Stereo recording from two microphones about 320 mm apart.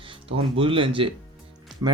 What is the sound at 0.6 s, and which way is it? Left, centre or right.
Speech, centre.